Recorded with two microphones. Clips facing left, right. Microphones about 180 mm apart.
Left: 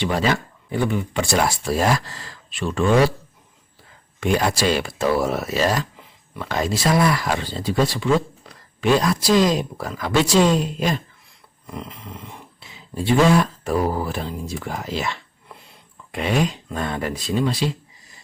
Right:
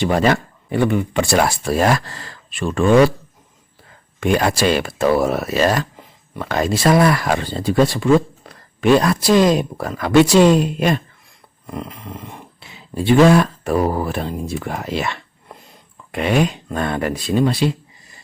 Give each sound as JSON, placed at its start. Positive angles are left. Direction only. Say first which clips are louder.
{"t": 0.0, "sound": "speech", "louder": "right 5 dB", "side_deg": -50}
{"t": 4.2, "sound": "speech", "louder": "right 3 dB", "side_deg": -60}
{"t": 6.0, "sound": "a sound", "louder": "right 4 dB", "side_deg": -40}
{"t": 6.5, "sound": "speech", "louder": "right 5 dB", "side_deg": -60}
{"t": 11.6, "sound": "speech", "louder": "right 4 dB", "side_deg": -50}